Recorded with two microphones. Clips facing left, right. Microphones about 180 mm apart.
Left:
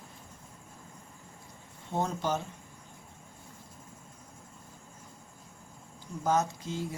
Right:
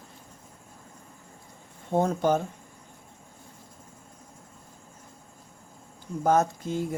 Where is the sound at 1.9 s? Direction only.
50° right (ahead or behind).